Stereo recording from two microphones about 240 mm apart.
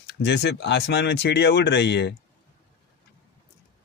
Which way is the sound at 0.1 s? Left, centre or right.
Left.